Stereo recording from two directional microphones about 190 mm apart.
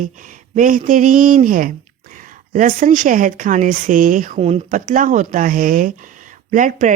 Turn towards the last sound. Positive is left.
turn(degrees=-45)  # may be behind; listen again after turning